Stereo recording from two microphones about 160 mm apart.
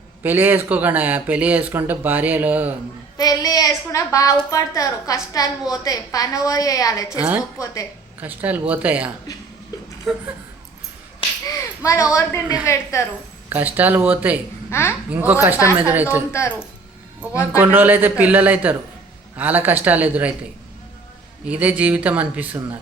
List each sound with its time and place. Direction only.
0.2 s speech: 15° right (ahead or behind)
3.2 s a woman's voice: 25° left (ahead or behind)
7.2 s speech: 10° right (ahead or behind)
7.6 s a woman's voice: 20° left (ahead or behind)
8.2 s speech: 10° right (ahead or behind)
10.1 s a sound: centre (ahead or behind)
11.4 s a sound: 20° left (ahead or behind)
12.1 s a woman's voice: 15° left (ahead or behind)
13.5 s speech: 10° right (ahead or behind)
14.7 s a child's voice: 15° left (ahead or behind)
15.1 s speech: 10° right (ahead or behind)
16.3 s a woman's voice: 15° left (ahead or behind)
17.6 s speech: 10° right (ahead or behind)
21.4 s speech: 10° right (ahead or behind)